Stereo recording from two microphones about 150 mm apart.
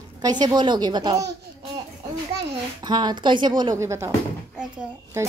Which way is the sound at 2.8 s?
30° right (ahead or behind).